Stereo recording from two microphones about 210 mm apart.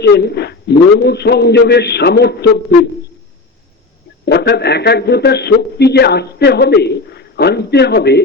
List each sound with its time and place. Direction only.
0.0 s a man's voice: 50° left (ahead or behind)
4.3 s a man's voice: 50° left (ahead or behind)